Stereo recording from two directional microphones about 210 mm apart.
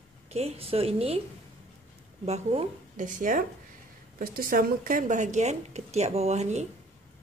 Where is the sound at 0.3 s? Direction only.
30° right (ahead or behind).